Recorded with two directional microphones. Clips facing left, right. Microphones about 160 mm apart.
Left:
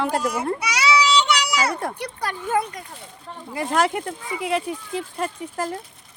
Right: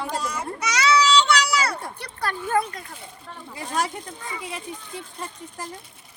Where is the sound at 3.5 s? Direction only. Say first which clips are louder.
Left 6 dB; 65° left (ahead or behind).